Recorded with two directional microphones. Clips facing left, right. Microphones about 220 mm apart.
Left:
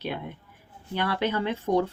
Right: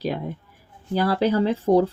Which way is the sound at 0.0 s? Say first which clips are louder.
Right 6 dB; 35° right (ahead or behind).